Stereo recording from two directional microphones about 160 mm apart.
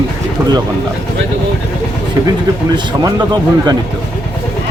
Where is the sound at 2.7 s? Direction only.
25° right (ahead or behind).